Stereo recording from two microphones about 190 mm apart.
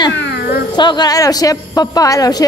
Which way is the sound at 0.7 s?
25° left (ahead or behind).